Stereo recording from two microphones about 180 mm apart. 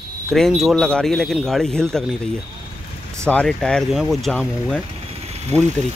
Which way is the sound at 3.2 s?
5° left (ahead or behind).